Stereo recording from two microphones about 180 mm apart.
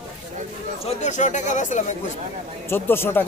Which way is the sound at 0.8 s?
40° left (ahead or behind).